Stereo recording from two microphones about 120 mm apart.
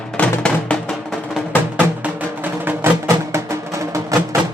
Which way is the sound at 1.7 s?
15° right (ahead or behind).